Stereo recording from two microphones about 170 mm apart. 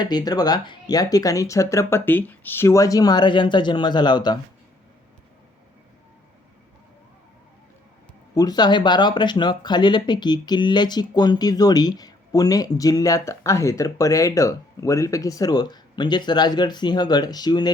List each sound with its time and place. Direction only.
0.0 s speech: 25° left (ahead or behind)
8.4 s speech: 25° left (ahead or behind)